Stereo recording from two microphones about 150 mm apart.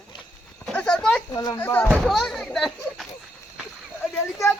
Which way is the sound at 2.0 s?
Centre (ahead or behind).